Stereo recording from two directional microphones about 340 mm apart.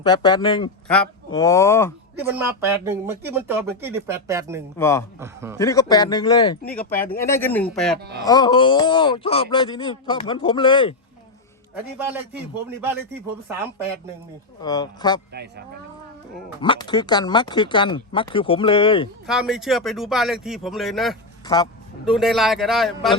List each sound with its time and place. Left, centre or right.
0.0 s speech: centre
2.1 s speech: centre
4.8 s speech: centre
5.2 s speech: centre
5.5 s speech: centre
7.9 s speech: right
8.3 s speech: centre
11.9 s speech: centre
14.6 s speech: centre
15.3 s speech: right
16.6 s speech: centre
19.3 s speech: centre
21.4 s speech: centre
22.0 s speech: centre